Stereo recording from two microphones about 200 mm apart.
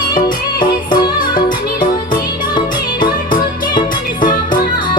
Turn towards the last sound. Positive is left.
turn(degrees=20)  # may be behind; listen again after turning